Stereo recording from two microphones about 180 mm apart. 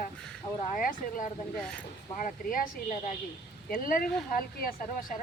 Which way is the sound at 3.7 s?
50° left (ahead or behind).